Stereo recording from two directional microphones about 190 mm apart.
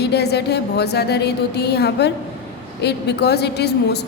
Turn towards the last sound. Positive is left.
turn(degrees=60)  # may be behind; listen again after turning